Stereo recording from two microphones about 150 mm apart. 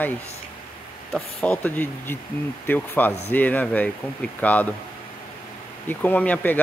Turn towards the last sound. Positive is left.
turn(degrees=10)  # may be behind; listen again after turning